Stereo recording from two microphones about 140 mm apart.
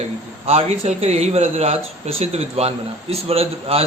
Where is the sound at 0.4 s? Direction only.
45° right (ahead or behind).